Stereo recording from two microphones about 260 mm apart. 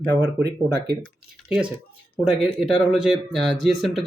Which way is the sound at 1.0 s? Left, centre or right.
Centre.